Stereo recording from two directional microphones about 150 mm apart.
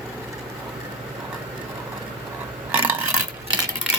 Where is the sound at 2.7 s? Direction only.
10° right (ahead or behind).